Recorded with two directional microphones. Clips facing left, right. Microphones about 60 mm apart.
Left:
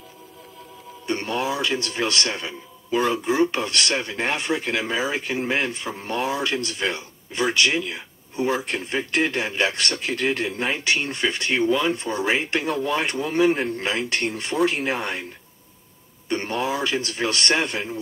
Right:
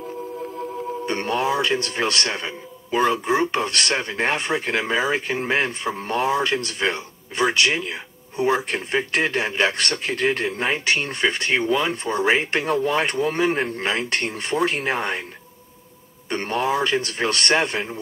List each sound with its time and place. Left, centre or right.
0.6 s a man's voice: right
16.3 s a man's voice: right